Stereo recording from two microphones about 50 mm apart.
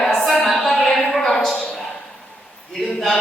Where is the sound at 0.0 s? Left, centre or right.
Centre.